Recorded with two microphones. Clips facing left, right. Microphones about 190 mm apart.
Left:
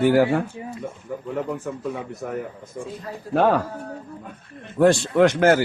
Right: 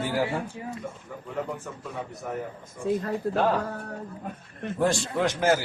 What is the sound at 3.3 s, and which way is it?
Speech, 65° left (ahead or behind).